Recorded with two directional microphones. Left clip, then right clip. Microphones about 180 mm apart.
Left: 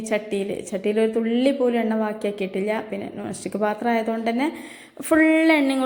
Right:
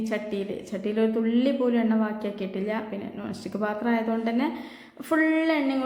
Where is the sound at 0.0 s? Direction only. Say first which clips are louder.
Left 5 dB; 20° left (ahead or behind).